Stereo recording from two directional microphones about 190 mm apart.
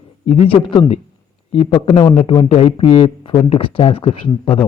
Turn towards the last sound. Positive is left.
turn(degrees=30)  # may be behind; listen again after turning